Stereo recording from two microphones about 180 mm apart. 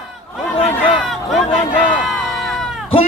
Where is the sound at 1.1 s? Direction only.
Centre (ahead or behind).